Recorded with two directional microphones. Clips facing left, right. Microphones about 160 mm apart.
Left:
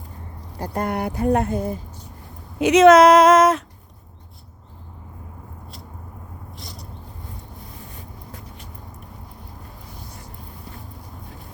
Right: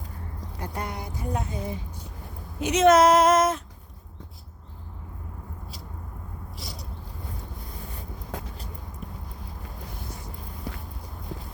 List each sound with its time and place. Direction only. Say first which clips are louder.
0.6 s speech: left 10 dB; 45° left (ahead or behind)
2.6 s speech: left 7 dB; 90° left
6.6 s a sound: even; centre (ahead or behind)